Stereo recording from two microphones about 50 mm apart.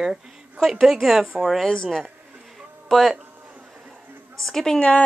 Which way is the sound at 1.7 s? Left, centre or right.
Centre.